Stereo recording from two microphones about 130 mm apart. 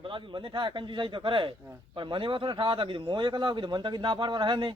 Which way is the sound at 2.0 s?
40° right (ahead or behind).